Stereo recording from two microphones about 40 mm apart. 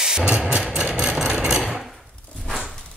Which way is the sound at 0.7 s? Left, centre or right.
Right.